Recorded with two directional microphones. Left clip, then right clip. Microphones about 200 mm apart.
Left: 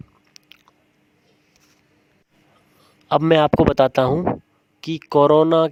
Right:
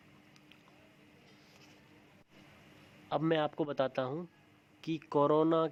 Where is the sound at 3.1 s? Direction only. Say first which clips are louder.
Left 17 dB; 55° left (ahead or behind).